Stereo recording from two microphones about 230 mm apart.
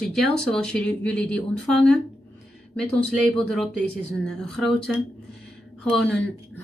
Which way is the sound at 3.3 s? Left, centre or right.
Centre.